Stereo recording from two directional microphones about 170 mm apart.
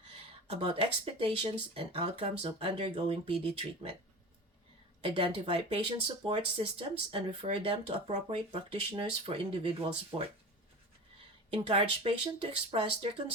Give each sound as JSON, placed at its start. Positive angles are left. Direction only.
{"t": 0.6, "sound": "speech", "side_deg": -35}
{"t": 5.0, "sound": "speech", "side_deg": -30}
{"t": 11.5, "sound": "speech", "side_deg": -30}